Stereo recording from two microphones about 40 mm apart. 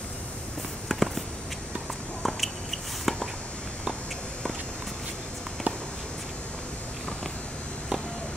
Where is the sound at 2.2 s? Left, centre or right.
Centre.